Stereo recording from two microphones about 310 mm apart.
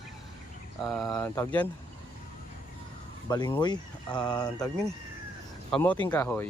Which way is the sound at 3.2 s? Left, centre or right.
Centre.